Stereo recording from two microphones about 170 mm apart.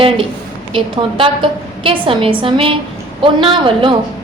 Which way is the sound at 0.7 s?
30° right (ahead or behind).